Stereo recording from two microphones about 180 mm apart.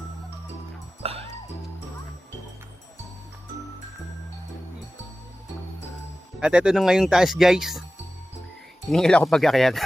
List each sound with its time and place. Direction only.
1.0 s music: 35° right (ahead or behind)
6.4 s speech: 5° right (ahead or behind)
8.9 s speech: 5° left (ahead or behind)